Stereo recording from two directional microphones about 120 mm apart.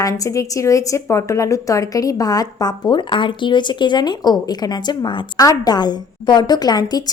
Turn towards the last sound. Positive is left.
turn(degrees=35)  # may be behind; listen again after turning